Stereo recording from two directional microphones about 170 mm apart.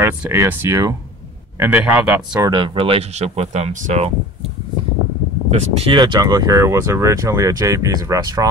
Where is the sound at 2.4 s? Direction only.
30° right (ahead or behind); by 4.1 s 45° right (ahead or behind).